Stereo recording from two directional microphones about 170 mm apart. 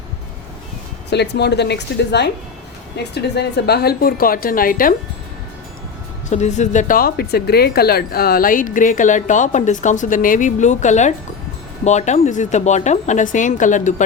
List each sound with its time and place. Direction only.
1.1 s a woman's voice: 85° left; by 4.9 s 55° left (ahead or behind)
6.3 s speech: 45° left (ahead or behind)